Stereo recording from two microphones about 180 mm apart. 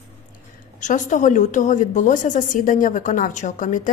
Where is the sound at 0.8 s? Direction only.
45° left (ahead or behind).